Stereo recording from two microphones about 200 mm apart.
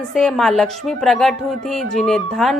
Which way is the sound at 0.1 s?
Centre (ahead or behind).